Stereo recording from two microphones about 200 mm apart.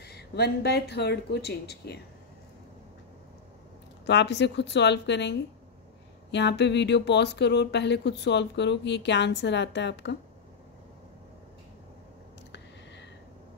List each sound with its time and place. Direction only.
0.0 s speech: 55° left (ahead or behind)
4.0 s speech: 60° left (ahead or behind)